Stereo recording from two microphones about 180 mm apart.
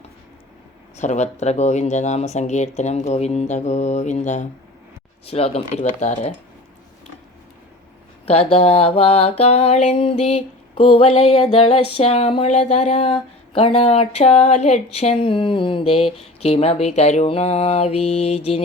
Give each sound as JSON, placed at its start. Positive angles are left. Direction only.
{"t": 0.9, "sound": "mantra", "side_deg": 40}
{"t": 8.3, "sound": "mantra", "side_deg": 30}